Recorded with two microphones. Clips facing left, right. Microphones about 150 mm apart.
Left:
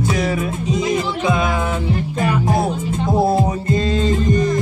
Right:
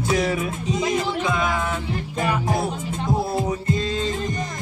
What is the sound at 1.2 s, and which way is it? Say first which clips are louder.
Music: left 5 dB; 15° left (ahead or behind).